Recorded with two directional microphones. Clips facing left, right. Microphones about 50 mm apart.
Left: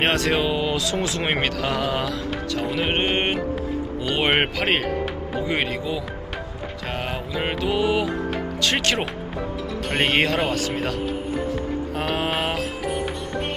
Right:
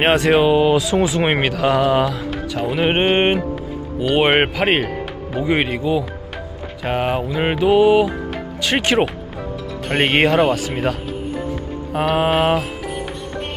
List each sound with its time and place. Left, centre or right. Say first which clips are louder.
0.0 s speech: right 7 dB; centre
2.6 s mantra: right 7 dB; centre
4.0 s speech: right 6 dB; centre
5.5 s mantra: right 8 dB; centre
8.6 s speech: right 6 dB; centre
11.9 s speech: right 9 dB; centre